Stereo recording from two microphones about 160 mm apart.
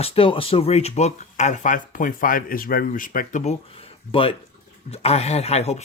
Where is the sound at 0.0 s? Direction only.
35° left (ahead or behind); by 3.5 s 55° left (ahead or behind).